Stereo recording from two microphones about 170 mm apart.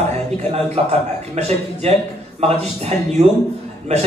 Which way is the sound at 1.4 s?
35° right (ahead or behind).